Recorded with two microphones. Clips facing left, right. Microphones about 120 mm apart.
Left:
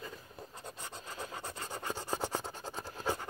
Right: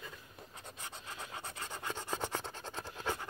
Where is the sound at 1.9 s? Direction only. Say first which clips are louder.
Left 2 dB; 10° left (ahead or behind).